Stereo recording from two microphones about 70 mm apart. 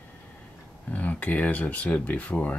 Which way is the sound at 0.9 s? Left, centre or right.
Left.